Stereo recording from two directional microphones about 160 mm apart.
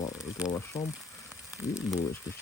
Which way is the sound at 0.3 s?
5° right (ahead or behind).